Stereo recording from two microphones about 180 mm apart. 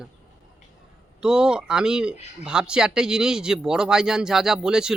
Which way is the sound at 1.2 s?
5° right (ahead or behind).